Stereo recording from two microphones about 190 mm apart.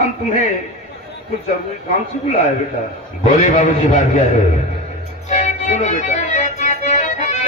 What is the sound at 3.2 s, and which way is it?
A man's voice, 40° left (ahead or behind).